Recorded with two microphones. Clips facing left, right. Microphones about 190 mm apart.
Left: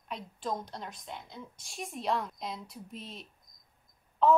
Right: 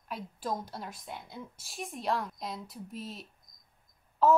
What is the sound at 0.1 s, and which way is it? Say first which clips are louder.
A woman's voice: even; 5° right (ahead or behind).